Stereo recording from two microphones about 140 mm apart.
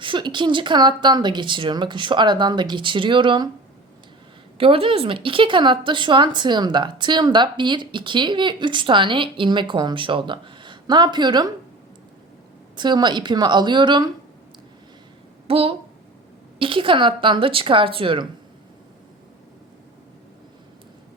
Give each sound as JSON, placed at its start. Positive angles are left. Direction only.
{"t": 0.0, "sound": "speech", "side_deg": -35}
{"t": 4.5, "sound": "speech", "side_deg": -40}
{"t": 12.7, "sound": "speech", "side_deg": -30}
{"t": 15.4, "sound": "a woman's voice", "side_deg": -45}